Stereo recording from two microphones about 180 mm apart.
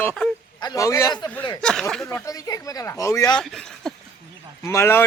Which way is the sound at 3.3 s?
5° left (ahead or behind).